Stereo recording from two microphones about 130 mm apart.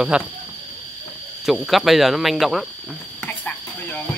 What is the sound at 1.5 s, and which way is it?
Speech, centre (ahead or behind).